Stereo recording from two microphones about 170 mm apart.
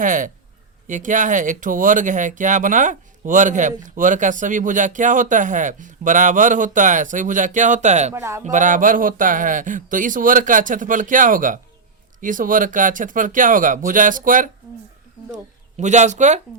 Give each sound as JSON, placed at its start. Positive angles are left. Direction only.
{"t": 0.0, "sound": "speech", "side_deg": -50}
{"t": 8.1, "sound": "speech", "side_deg": -15}
{"t": 8.4, "sound": "speech", "side_deg": -50}
{"t": 15.8, "sound": "speech", "side_deg": -45}